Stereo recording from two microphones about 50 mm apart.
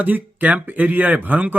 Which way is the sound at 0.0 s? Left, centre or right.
Right.